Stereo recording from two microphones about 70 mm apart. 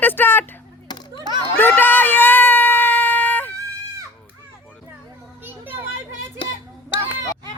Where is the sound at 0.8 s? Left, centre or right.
Left.